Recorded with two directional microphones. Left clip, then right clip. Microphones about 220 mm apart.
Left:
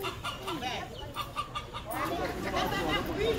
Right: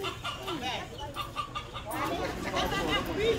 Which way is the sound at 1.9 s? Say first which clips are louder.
Even; 25° right (ahead or behind).